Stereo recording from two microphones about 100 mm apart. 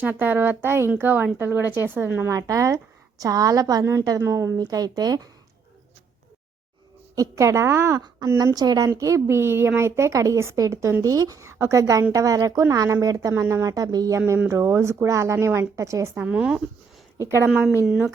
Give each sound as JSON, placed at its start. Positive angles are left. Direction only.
{"t": 0.0, "sound": "a woman's voice", "side_deg": -20}
{"t": 7.2, "sound": "speech", "side_deg": -30}
{"t": 8.5, "sound": "a woman's voice", "side_deg": -40}
{"t": 9.0, "sound": "a woman's voice", "side_deg": -30}
{"t": 14.2, "sound": "a woman's voice", "side_deg": -20}
{"t": 16.1, "sound": "speech", "side_deg": -15}
{"t": 17.2, "sound": "speech", "side_deg": -30}